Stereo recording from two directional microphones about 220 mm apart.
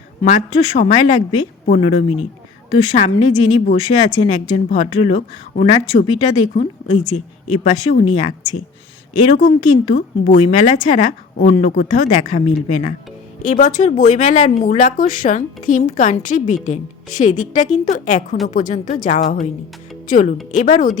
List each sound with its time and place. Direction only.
0.3 s speech: 35° left (ahead or behind)